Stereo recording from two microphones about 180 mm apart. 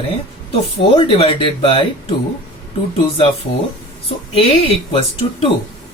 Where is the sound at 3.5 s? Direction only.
45° left (ahead or behind).